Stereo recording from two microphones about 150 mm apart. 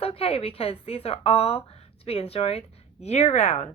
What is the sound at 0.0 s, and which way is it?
A woman's voice, 40° left (ahead or behind).